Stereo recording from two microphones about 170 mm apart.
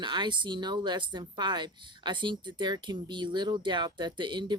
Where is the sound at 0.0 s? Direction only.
25° right (ahead or behind).